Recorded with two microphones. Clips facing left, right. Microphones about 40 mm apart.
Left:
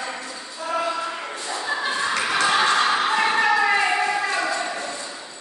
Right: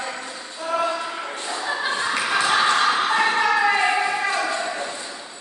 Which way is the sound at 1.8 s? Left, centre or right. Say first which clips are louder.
Even; centre.